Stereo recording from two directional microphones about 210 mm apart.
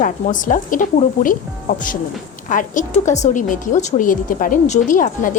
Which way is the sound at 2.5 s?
40° left (ahead or behind).